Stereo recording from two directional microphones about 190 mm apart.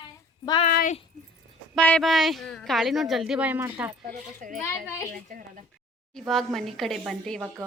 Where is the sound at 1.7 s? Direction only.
5° left (ahead or behind); by 3.9 s 10° right (ahead or behind).